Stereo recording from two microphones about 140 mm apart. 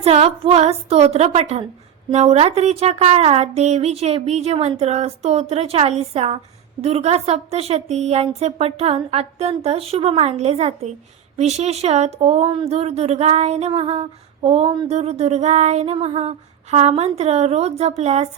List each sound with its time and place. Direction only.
0.0 s a woman's voice: 45° right (ahead or behind)
14.8 s a woman's voice: 50° right (ahead or behind)